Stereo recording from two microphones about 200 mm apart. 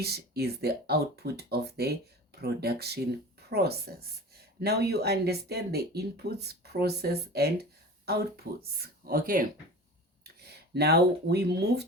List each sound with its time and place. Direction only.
0.0 s speech: 55° right (ahead or behind)